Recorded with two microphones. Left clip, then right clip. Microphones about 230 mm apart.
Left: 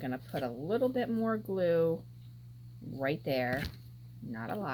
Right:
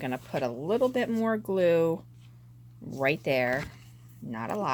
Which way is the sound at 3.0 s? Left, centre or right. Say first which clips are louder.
Right 6 dB; right.